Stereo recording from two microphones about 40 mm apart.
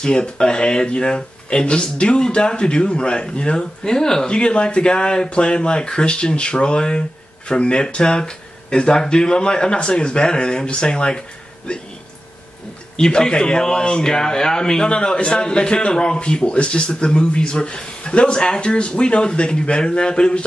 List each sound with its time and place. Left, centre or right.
0.0 s speech: left
3.8 s speech: centre
12.9 s speech: centre